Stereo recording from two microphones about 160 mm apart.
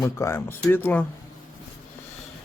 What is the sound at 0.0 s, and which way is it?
Speech, 15° left (ahead or behind).